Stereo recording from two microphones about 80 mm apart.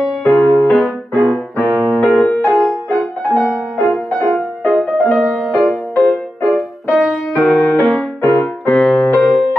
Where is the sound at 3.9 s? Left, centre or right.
Centre.